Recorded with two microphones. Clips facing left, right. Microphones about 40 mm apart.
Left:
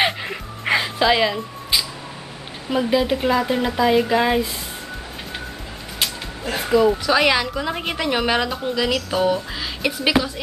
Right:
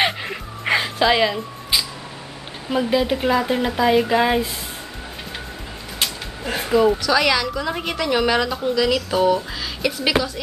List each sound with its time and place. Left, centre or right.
0.0 s music: centre
2.7 s speech: centre
6.5 s speech: centre
7.0 s speech: left